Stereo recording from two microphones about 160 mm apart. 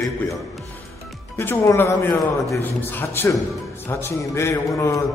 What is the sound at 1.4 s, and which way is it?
A man's voice, 15° left (ahead or behind).